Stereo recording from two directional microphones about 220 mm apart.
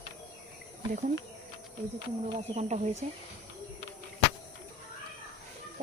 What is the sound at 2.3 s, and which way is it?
Speech, 30° right (ahead or behind).